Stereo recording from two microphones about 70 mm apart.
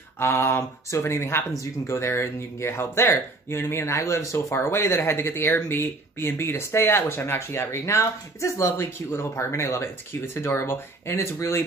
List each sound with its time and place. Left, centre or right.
0.2 s speech: left